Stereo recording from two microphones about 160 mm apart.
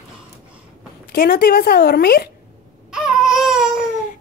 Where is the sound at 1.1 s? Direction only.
65° left (ahead or behind).